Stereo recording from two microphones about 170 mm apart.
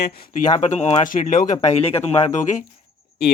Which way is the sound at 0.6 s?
40° left (ahead or behind).